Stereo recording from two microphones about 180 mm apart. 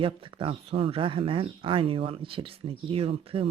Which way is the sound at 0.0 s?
30° right (ahead or behind).